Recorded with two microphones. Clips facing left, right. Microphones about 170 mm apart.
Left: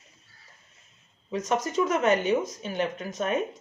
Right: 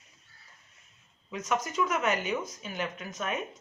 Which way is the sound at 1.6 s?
35° left (ahead or behind).